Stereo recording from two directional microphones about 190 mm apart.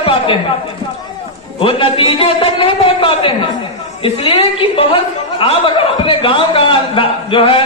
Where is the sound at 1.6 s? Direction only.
30° left (ahead or behind).